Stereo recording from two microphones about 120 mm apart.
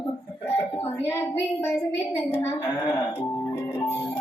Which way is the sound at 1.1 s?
20° left (ahead or behind).